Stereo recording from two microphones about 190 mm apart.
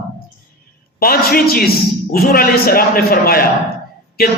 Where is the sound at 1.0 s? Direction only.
50° left (ahead or behind).